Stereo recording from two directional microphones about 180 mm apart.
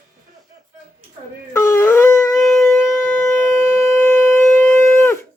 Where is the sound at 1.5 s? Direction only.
15° left (ahead or behind).